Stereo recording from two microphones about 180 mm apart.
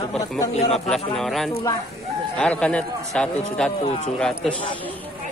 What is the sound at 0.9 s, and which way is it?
A man's voice, centre (ahead or behind).